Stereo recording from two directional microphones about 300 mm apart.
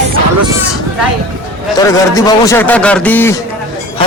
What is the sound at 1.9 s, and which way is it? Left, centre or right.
A man's voice, centre.